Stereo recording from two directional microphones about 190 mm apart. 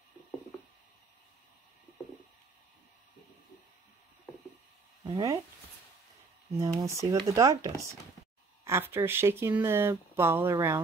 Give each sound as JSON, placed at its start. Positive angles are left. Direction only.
{"t": 5.0, "sound": "speech", "side_deg": -20}
{"t": 6.6, "sound": "speech", "side_deg": -15}